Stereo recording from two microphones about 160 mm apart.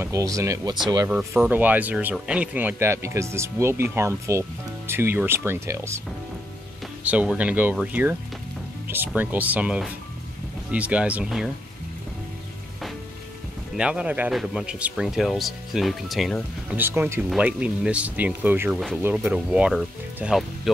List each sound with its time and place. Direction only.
0.0 s speech: 20° right (ahead or behind)
1.1 s speech: 10° right (ahead or behind)
7.1 s speech: 10° right (ahead or behind)
13.7 s speech: 5° right (ahead or behind)
16.7 s speech: 10° right (ahead or behind)